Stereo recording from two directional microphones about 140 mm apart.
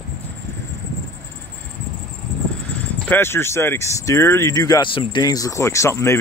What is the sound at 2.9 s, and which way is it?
Speech, 15° left (ahead or behind).